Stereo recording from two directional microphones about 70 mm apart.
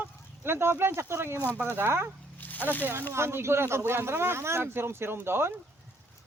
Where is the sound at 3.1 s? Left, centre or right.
Right.